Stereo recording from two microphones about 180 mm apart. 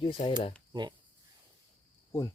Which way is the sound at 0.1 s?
30° left (ahead or behind).